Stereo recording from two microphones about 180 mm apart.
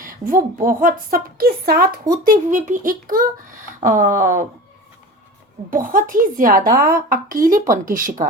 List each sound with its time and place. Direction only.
0.0 s a woman's voice: 50° right (ahead or behind)
2.2 s a woman's voice: 45° right (ahead or behind)
5.7 s a woman's voice: 50° right (ahead or behind)